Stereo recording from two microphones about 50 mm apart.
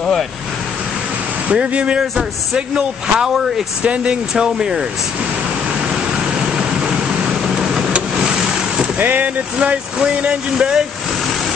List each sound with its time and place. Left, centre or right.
1.5 s a man's voice: right
6.5 s vehicle: centre
8.9 s speech: right
9.6 s speech: right